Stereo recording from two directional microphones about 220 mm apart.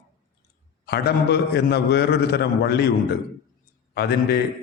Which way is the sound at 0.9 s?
50° left (ahead or behind).